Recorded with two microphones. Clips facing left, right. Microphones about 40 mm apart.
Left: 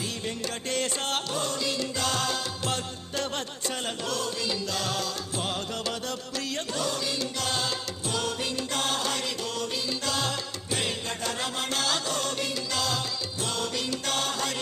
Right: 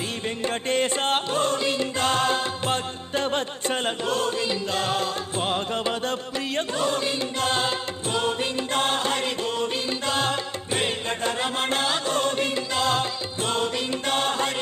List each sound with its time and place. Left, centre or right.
0.4 s music: right